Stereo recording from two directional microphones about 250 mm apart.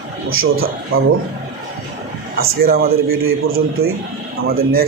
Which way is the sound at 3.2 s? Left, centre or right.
Right.